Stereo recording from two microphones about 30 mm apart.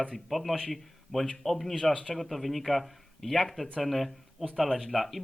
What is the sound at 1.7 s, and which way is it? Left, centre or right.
Speech, left.